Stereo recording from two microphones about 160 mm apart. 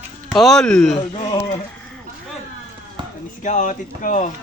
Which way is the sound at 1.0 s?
30° left (ahead or behind).